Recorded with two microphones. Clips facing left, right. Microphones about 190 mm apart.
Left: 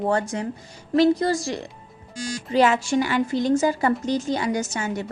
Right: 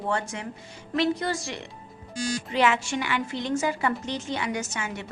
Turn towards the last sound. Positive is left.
turn(degrees=40)  # may be behind; listen again after turning